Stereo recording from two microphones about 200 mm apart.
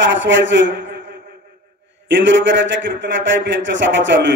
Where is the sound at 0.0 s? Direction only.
65° right (ahead or behind).